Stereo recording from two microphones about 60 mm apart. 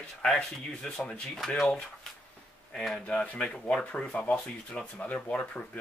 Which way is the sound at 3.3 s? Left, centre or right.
Left.